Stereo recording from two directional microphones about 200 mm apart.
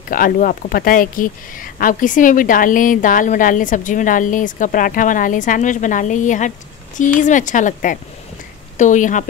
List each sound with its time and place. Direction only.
0.1 s speech: 45° left (ahead or behind)